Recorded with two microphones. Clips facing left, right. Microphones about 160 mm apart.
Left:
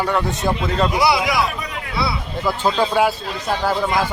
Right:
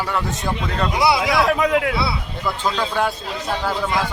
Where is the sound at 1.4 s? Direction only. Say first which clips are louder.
Right 9 dB; 90° right.